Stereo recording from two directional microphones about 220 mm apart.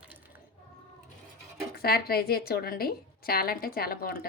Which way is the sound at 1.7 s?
45° left (ahead or behind).